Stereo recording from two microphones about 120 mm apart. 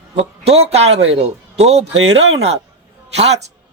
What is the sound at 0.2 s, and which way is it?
A man's voice, 55° right (ahead or behind).